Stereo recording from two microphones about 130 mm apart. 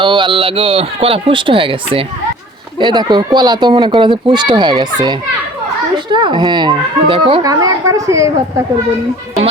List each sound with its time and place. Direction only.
0.0 s speech: 40° right (ahead or behind)
7.4 s a woman's voice: 25° right (ahead or behind)